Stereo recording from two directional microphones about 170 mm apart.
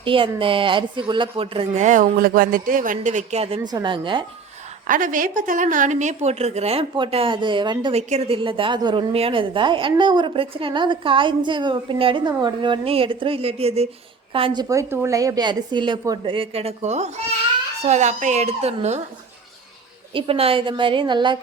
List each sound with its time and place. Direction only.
0.0 s a woman's voice: 30° right (ahead or behind)
4.9 s a woman's voice: 50° right (ahead or behind); by 7.9 s 25° right (ahead or behind)
7.9 s a woman's voice: 40° right (ahead or behind)
20.1 s a woman's voice: 35° right (ahead or behind)